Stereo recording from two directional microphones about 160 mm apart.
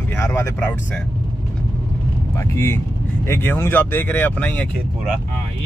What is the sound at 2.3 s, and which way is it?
Speech, 15° left (ahead or behind).